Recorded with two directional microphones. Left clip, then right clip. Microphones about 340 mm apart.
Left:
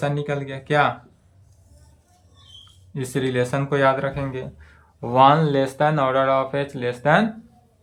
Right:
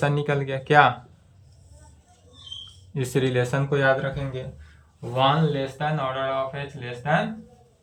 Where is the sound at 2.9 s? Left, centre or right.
Centre.